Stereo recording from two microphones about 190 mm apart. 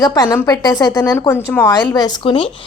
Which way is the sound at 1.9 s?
20° left (ahead or behind).